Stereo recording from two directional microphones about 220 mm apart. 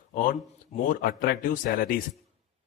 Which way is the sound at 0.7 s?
35° left (ahead or behind).